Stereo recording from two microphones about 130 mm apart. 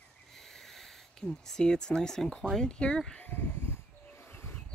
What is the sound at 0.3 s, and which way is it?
Speech, 5° left (ahead or behind).